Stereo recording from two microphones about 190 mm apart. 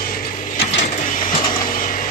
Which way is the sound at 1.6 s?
45° left (ahead or behind).